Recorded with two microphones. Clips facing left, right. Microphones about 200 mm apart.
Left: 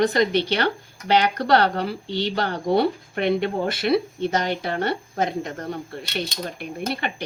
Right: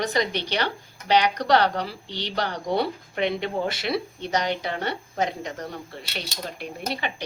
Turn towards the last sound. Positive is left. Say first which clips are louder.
# left 4 dB
turn(degrees=55)  # may be behind; listen again after turning